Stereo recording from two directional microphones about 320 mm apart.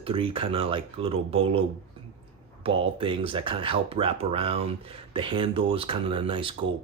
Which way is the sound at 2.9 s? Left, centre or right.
Centre.